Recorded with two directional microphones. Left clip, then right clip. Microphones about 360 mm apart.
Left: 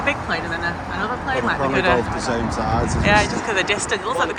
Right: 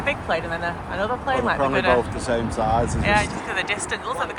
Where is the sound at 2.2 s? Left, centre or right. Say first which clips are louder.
Left 1 dB; right.